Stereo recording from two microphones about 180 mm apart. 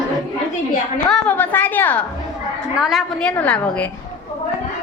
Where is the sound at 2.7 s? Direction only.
Centre (ahead or behind).